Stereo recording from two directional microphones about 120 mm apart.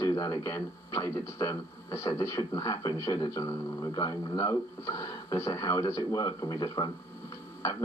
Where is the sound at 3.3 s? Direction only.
25° left (ahead or behind).